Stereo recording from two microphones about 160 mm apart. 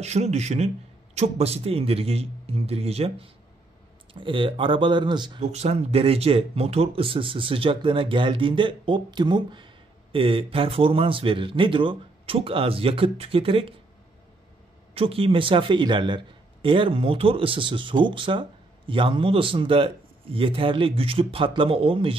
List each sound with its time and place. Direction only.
0.0 s a man's voice: 45° right (ahead or behind); by 5.4 s 30° right (ahead or behind)
5.4 s a man's voice: 40° right (ahead or behind)
15.0 s a man's voice: 35° right (ahead or behind)